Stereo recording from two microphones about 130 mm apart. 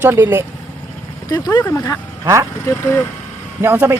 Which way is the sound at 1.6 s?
20° left (ahead or behind).